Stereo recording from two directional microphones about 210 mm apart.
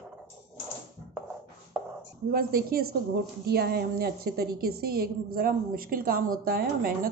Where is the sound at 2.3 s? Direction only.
45° right (ahead or behind).